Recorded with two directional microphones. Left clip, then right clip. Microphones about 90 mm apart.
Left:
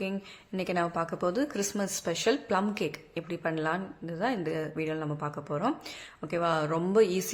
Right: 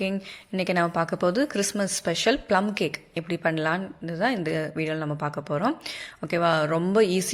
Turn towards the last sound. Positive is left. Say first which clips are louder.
# right 3 dB
turn(degrees=-30)  # may be behind; listen again after turning